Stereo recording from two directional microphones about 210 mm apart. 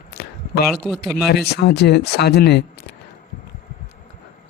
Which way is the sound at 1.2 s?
50° left (ahead or behind).